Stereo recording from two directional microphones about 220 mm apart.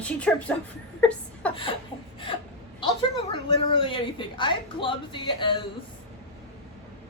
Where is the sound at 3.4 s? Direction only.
25° left (ahead or behind).